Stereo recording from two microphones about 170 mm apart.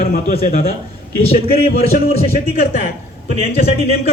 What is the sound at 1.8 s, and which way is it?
Speech, 35° left (ahead or behind).